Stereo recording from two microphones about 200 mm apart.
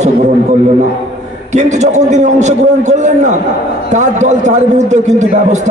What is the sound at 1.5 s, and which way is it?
A man's voice, 35° right (ahead or behind).